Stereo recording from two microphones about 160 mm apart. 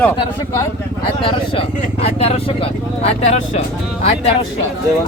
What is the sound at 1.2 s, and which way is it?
Speech, 35° left (ahead or behind).